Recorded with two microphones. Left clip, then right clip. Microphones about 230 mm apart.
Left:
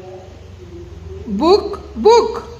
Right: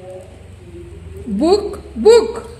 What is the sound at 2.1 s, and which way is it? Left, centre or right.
Speech, centre.